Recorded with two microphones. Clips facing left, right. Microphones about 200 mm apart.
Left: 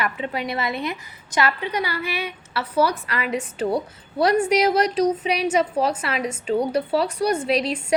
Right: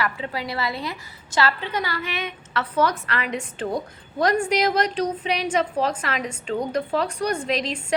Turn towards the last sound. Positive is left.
turn(degrees=35)  # may be behind; listen again after turning